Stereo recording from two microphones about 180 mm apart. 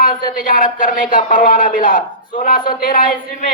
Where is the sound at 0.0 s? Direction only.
50° left (ahead or behind).